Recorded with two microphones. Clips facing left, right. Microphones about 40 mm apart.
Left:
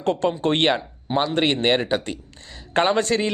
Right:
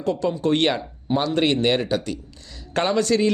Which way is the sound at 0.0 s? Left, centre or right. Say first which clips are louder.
Left 1 dB; left.